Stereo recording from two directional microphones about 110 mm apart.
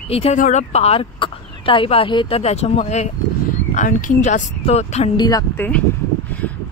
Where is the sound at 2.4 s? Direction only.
70° left (ahead or behind).